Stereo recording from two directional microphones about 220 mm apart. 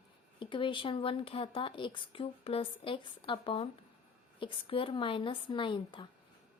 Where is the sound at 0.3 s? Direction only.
20° left (ahead or behind).